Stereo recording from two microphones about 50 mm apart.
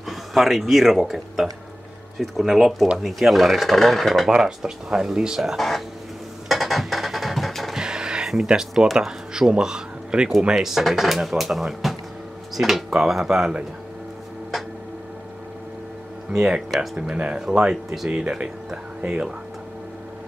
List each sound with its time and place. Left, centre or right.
0.1 s speech: centre
4.3 s speech: centre
5.6 s speech: centre
6.5 s music: centre
7.7 s music: centre
8.5 s speech: centre
16.3 s speech: centre
17.1 s speech: right
17.5 s speech: centre
18.1 s speech: right